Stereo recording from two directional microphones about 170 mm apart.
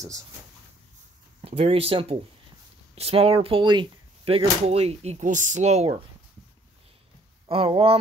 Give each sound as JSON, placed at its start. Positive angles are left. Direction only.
{"t": 1.4, "sound": "speech", "side_deg": -35}
{"t": 7.4, "sound": "speech", "side_deg": -35}